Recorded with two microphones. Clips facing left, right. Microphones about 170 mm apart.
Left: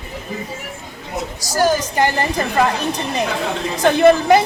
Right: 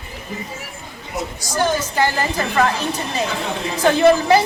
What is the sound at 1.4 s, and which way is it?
Speech, 40° left (ahead or behind).